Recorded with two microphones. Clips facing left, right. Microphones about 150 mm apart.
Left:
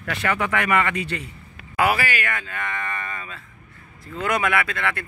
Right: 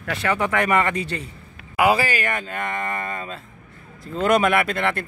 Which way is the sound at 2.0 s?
30° right (ahead or behind).